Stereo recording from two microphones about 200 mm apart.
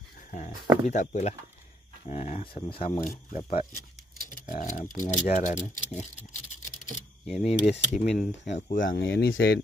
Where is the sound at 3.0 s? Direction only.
45° left (ahead or behind).